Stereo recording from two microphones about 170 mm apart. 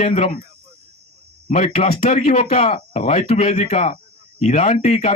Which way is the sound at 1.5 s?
45° left (ahead or behind).